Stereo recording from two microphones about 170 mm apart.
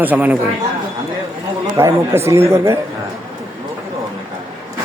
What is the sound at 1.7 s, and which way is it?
Speech, 15° right (ahead or behind).